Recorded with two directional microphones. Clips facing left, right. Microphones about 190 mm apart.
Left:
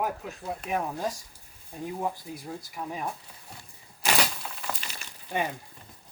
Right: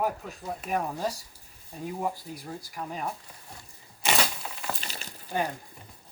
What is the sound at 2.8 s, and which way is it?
Speech, 5° left (ahead or behind).